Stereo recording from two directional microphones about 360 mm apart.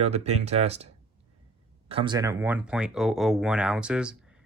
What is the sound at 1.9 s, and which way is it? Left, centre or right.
Speech, centre.